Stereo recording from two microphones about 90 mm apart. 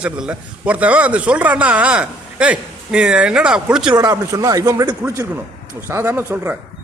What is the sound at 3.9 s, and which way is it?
Speech, 45° right (ahead or behind).